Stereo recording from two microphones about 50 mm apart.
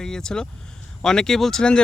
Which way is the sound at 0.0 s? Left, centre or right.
Centre.